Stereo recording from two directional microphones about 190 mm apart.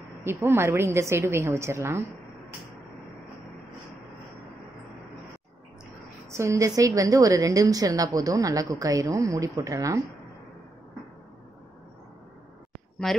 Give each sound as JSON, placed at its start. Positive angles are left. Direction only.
{"t": 0.2, "sound": "a woman's voice", "side_deg": -10}
{"t": 6.3, "sound": "a woman's voice", "side_deg": -15}